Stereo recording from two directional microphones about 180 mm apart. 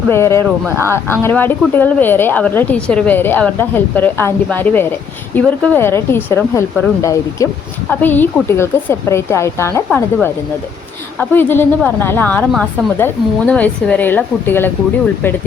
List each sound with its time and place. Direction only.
0.1 s speech: 15° left (ahead or behind)
11.2 s speech: 10° left (ahead or behind)